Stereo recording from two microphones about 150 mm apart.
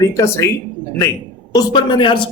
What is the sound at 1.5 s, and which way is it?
Speech, 25° left (ahead or behind).